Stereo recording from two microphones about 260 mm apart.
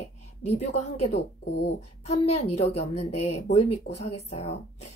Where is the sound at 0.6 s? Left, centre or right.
Left.